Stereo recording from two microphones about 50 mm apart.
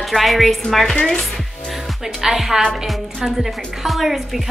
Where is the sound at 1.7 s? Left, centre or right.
Centre.